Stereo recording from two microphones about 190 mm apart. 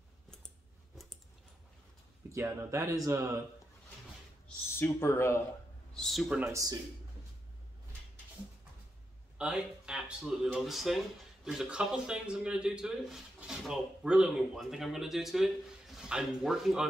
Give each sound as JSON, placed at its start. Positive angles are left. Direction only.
{"t": 2.3, "sound": "speech", "side_deg": -15}
{"t": 4.7, "sound": "speech", "side_deg": 15}
{"t": 5.9, "sound": "speech", "side_deg": 0}
{"t": 6.4, "sound": "speech", "side_deg": -15}
{"t": 9.4, "sound": "speech", "side_deg": -5}